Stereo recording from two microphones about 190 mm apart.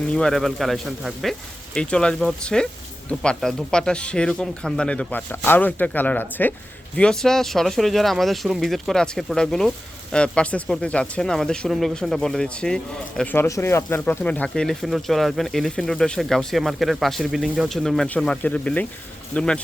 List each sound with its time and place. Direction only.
0.1 s speech: 5° left (ahead or behind)